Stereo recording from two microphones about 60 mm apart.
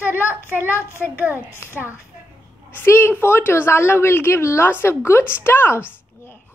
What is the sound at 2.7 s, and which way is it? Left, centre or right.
A woman's voice, left.